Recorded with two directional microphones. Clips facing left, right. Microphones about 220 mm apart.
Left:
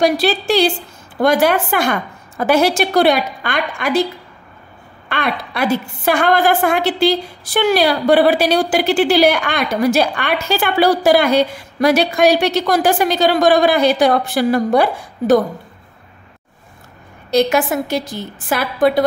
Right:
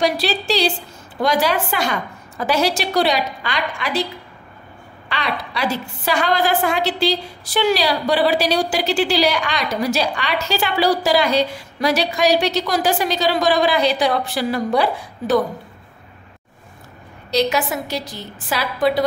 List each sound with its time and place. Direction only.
0.0 s a woman's voice: 50° left (ahead or behind)
5.1 s a woman's voice: 55° left (ahead or behind)
17.3 s a woman's voice: 50° left (ahead or behind)